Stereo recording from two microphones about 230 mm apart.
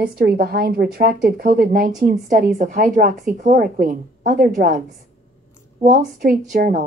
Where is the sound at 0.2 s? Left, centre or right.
Right.